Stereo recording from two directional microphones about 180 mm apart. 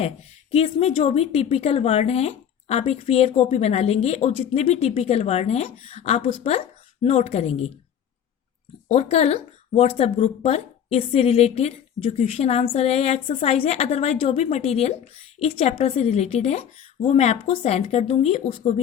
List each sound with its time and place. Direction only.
0.5 s speech: 35° left (ahead or behind)
8.9 s speech: 35° left (ahead or behind)